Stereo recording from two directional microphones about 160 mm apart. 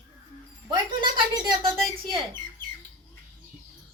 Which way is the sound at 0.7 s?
30° right (ahead or behind).